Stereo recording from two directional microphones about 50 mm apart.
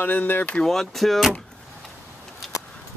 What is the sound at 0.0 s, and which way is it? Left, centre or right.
Speech, left.